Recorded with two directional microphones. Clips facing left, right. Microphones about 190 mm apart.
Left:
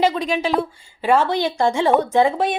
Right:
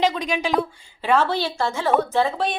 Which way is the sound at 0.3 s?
Centre (ahead or behind).